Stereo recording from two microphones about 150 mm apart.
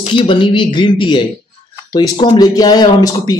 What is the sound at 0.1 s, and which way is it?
Speech, 35° left (ahead or behind).